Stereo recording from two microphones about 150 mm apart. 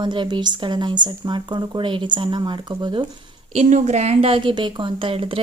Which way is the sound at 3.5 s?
50° right (ahead or behind).